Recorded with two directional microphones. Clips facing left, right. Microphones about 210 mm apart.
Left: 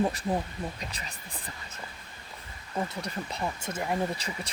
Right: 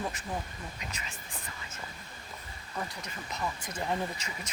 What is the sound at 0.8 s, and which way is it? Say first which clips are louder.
Speech: left 2 dB; 35° left (ahead or behind).